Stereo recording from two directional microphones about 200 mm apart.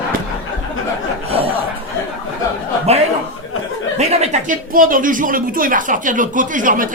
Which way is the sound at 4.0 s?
35° right (ahead or behind).